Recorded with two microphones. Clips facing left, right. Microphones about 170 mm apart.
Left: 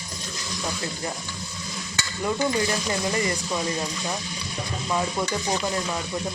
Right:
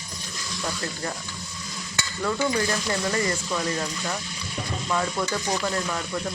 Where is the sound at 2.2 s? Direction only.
20° left (ahead or behind).